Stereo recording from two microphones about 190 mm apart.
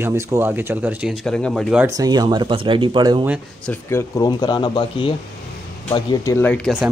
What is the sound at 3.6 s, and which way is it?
Speech, 15° left (ahead or behind).